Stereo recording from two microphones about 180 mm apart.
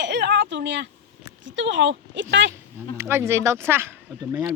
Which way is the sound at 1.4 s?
90° right.